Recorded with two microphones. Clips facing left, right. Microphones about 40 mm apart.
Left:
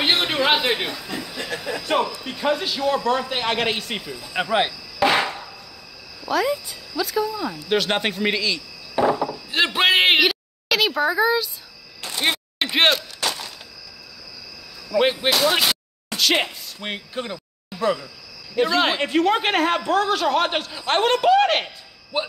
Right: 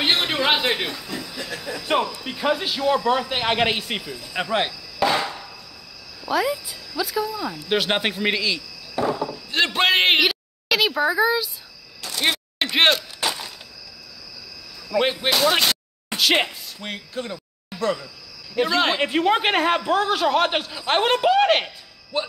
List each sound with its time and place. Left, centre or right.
0.0 s a man's voice: centre
1.7 s speech: left
2.1 s a man's voice: centre
5.0 s chop: left
6.2 s a man's voice: centre
9.0 s a sound: left
9.3 s a sound: centre
15.0 s a man's voice: centre
16.8 s speech: left
17.7 s speech: centre
18.5 s a man's voice: centre
22.1 s speech: centre